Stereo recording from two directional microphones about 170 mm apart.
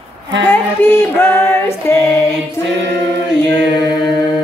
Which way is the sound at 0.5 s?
10° left (ahead or behind).